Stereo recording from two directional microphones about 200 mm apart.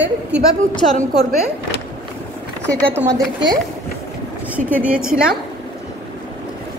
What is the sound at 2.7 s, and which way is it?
Speech, 10° right (ahead or behind).